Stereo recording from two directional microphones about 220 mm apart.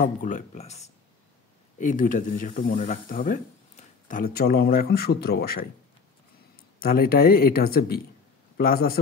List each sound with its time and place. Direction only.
0.0 s speech: 35° left (ahead or behind)
6.8 s speech: 40° left (ahead or behind)